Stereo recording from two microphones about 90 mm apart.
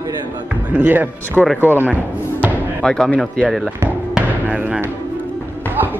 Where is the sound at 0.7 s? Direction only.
20° right (ahead or behind).